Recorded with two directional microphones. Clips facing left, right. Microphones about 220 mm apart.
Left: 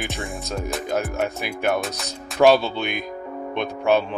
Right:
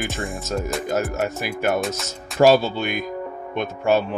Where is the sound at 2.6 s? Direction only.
45° right (ahead or behind).